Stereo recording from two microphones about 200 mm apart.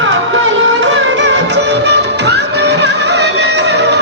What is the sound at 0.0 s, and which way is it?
Music, 65° right (ahead or behind).